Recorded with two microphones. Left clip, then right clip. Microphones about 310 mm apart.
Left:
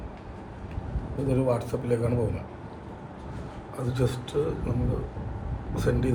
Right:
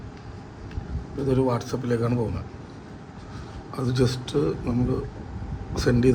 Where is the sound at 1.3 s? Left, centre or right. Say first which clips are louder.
Right 2 dB; centre.